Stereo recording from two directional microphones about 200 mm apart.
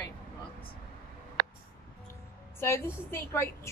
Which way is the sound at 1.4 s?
50° right (ahead or behind).